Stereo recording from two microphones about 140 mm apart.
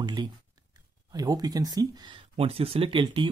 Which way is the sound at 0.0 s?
30° right (ahead or behind).